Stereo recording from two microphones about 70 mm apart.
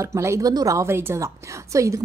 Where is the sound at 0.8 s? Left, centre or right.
Right.